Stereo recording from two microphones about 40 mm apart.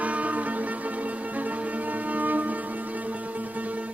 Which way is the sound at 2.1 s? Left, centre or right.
Right.